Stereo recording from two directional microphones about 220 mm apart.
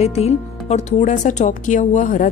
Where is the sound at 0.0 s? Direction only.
30° left (ahead or behind).